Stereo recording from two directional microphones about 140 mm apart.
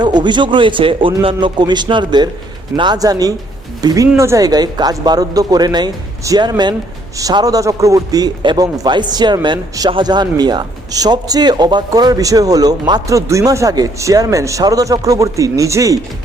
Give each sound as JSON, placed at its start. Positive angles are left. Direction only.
{"t": 0.0, "sound": "a man's voice", "side_deg": -30}